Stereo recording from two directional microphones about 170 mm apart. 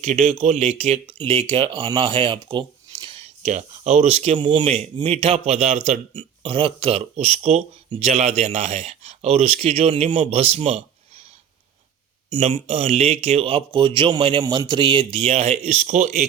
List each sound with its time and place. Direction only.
0.0 s a man's voice: 45° right (ahead or behind)
4.6 s a man's voice: 40° right (ahead or behind)
12.5 s a man's voice: 35° right (ahead or behind)